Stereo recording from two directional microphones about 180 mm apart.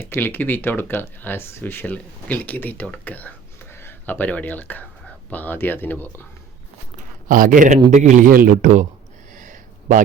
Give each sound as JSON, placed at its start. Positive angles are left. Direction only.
{"t": 0.0, "sound": "speech", "side_deg": 10}
{"t": 7.3, "sound": "a man's voice", "side_deg": -50}
{"t": 9.3, "sound": "a sound", "side_deg": -45}